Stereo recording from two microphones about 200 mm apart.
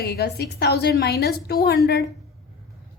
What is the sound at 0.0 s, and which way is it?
A woman's voice, 50° left (ahead or behind).